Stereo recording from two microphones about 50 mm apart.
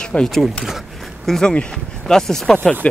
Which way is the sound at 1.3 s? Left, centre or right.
Centre.